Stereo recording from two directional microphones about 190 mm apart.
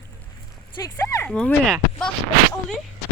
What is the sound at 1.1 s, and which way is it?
Speech, 10° left (ahead or behind).